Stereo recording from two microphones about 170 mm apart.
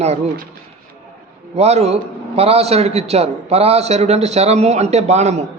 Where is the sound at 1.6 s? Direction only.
40° right (ahead or behind).